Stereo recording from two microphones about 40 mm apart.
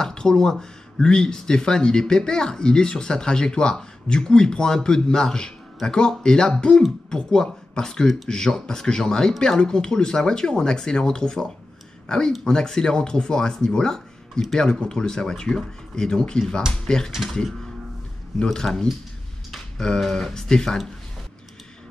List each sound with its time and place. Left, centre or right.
0.0 s speech: centre
17.1 s speech: centre
18.4 s speech: centre